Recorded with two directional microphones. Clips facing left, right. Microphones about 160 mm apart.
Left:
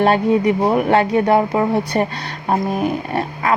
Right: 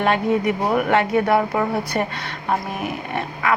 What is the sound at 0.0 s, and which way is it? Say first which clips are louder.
A woman's voice: left 4 dB; 35° left (ahead or behind).